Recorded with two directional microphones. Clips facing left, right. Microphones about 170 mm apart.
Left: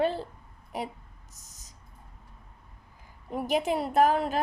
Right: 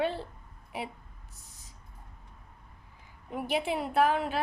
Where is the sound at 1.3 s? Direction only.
40° left (ahead or behind).